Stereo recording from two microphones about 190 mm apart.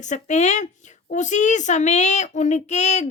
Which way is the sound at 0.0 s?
40° left (ahead or behind).